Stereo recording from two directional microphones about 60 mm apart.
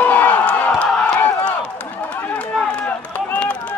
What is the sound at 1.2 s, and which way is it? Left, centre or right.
Run, left.